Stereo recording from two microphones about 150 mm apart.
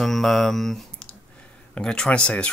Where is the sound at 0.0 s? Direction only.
Centre (ahead or behind).